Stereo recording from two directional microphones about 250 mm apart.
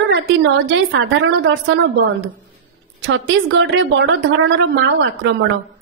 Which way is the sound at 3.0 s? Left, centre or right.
Right.